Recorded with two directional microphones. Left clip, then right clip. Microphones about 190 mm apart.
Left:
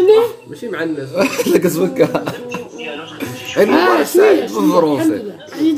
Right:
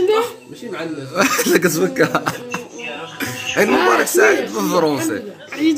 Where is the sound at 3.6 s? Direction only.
10° right (ahead or behind).